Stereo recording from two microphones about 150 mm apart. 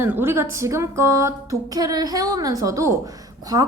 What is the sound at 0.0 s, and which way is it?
A woman's voice, 15° right (ahead or behind).